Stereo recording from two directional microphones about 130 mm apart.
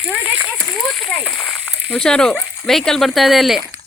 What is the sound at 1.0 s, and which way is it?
Speech, 5° left (ahead or behind).